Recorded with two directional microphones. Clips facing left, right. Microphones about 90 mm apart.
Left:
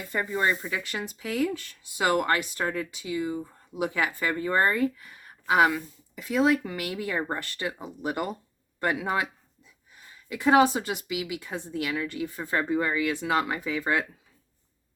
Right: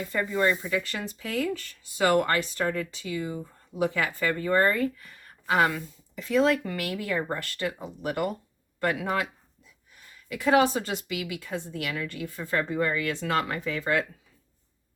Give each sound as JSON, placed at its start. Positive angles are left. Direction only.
{"t": 0.1, "sound": "speech", "side_deg": 20}